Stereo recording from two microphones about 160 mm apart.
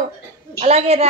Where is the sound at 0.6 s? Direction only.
40° right (ahead or behind).